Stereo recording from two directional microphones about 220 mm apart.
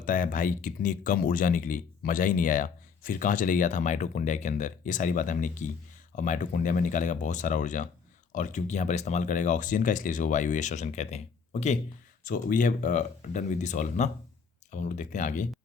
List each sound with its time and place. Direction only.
0.0 s speech: 40° left (ahead or behind)